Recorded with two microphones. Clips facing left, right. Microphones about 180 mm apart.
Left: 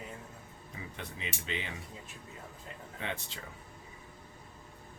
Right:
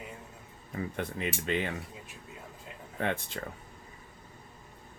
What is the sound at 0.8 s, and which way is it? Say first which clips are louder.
Speech: right 10 dB; 55° right (ahead or behind).